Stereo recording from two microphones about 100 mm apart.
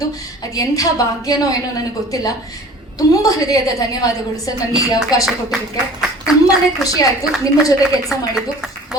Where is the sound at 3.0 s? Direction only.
35° left (ahead or behind).